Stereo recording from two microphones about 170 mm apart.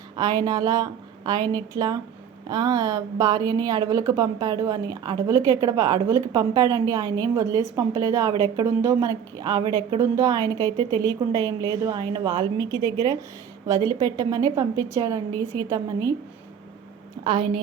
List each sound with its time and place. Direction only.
0.2 s speech: 25° right (ahead or behind)
17.2 s speech: 30° right (ahead or behind)